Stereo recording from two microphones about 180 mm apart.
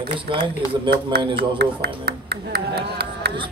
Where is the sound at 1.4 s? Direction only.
65° right (ahead or behind).